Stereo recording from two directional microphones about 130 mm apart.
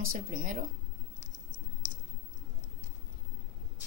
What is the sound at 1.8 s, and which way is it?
Clicking, 35° right (ahead or behind).